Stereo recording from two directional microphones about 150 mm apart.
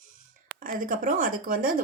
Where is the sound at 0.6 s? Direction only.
65° right (ahead or behind).